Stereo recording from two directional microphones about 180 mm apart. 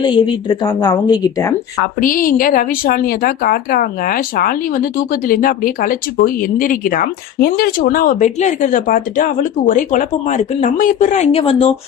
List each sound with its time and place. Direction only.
0.0 s a woman's voice: 25° left (ahead or behind)
2.0 s a woman's voice: 50° left (ahead or behind); by 11.7 s 35° left (ahead or behind)